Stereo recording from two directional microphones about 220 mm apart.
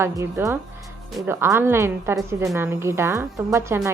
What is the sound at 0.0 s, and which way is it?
A woman's voice, 15° right (ahead or behind).